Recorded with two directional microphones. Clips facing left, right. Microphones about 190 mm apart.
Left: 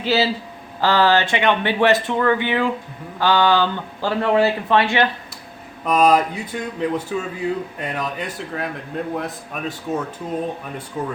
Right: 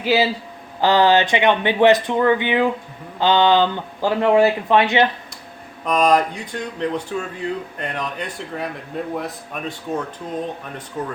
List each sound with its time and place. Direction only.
0.0 s speech: 10° right (ahead or behind)
5.8 s speech: 5° left (ahead or behind)